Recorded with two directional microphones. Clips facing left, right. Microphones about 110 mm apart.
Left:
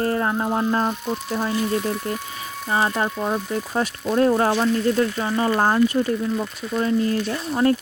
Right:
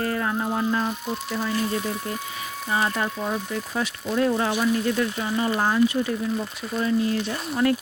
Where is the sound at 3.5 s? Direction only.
40° left (ahead or behind).